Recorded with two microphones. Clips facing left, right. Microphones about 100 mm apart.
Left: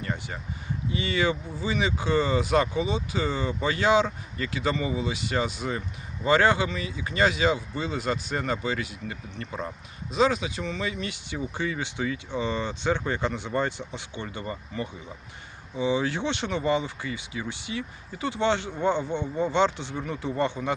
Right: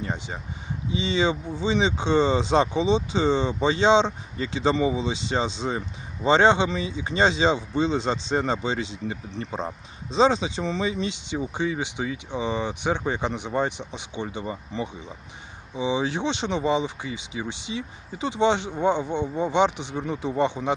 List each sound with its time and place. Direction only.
0.0 s speech: 20° right (ahead or behind)
15.7 s speech: 20° right (ahead or behind)